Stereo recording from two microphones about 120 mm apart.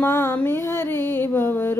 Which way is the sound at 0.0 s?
20° left (ahead or behind).